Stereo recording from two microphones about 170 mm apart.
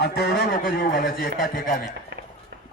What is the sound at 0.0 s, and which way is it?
A man's voice, 70° left (ahead or behind).